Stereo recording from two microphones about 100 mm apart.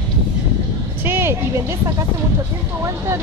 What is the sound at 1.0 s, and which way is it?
Vehicle, 25° right (ahead or behind).